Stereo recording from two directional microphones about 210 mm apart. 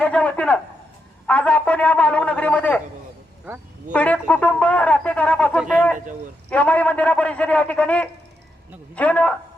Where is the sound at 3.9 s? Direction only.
5° left (ahead or behind).